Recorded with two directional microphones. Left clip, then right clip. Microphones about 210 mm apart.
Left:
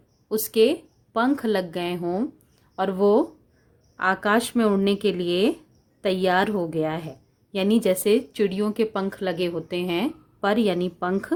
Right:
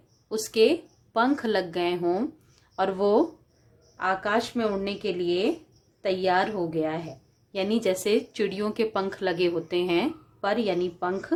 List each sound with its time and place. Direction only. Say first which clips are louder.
0.3 s speech: left 2 dB; 35° left (ahead or behind)